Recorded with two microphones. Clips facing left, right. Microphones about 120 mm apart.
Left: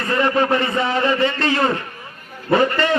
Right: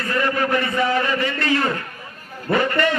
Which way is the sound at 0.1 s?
25° left (ahead or behind).